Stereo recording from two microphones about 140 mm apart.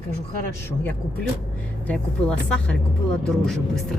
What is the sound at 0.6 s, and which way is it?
Speech, 15° left (ahead or behind).